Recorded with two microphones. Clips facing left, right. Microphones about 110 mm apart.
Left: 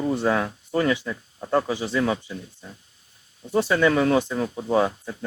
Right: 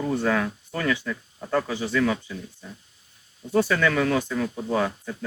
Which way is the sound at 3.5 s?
20° left (ahead or behind).